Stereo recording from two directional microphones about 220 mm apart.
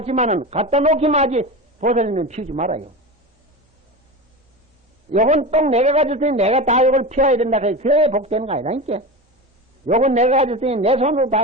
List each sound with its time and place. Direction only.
0.0 s a man's voice: 30° right (ahead or behind)
5.1 s a man's voice: 35° right (ahead or behind)